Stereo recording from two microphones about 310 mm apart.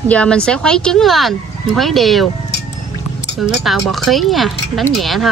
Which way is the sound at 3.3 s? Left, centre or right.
Centre.